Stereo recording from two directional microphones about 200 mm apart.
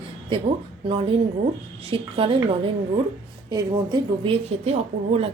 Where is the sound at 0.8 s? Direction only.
25° right (ahead or behind).